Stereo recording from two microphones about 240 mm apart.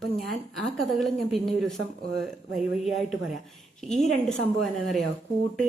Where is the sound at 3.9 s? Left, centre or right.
Centre.